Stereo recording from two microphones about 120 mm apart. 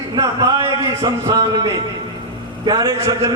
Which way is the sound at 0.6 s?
30° right (ahead or behind).